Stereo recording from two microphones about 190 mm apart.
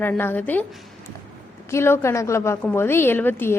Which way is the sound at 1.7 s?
15° left (ahead or behind).